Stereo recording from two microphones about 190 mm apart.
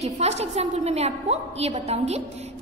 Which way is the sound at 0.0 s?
35° right (ahead or behind).